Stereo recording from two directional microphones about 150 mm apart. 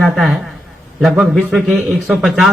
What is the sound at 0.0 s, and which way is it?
A man's voice, centre (ahead or behind).